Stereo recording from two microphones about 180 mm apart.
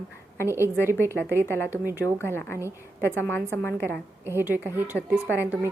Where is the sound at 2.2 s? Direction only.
10° left (ahead or behind).